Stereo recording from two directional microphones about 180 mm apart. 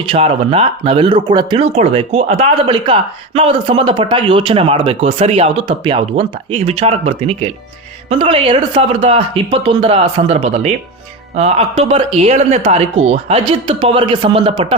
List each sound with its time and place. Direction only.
0.0 s speech: 30° right (ahead or behind)